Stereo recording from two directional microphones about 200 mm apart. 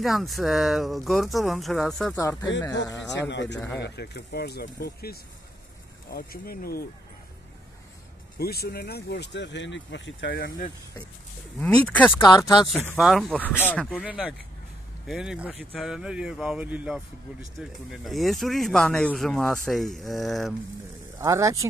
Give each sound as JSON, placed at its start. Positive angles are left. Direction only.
{"t": 0.0, "sound": "speech", "side_deg": 0}
{"t": 2.1, "sound": "speech", "side_deg": 15}
{"t": 3.3, "sound": "speech", "side_deg": 60}
{"t": 3.5, "sound": "speech", "side_deg": 15}
{"t": 3.8, "sound": "speech", "side_deg": 55}
{"t": 8.4, "sound": "speech", "side_deg": 50}
{"t": 11.6, "sound": "speech", "side_deg": 5}
{"t": 12.3, "sound": "speech", "side_deg": 20}
{"t": 12.9, "sound": "speech", "side_deg": 0}
{"t": 13.8, "sound": "speech", "side_deg": -5}
{"t": 21.2, "sound": "speech", "side_deg": -15}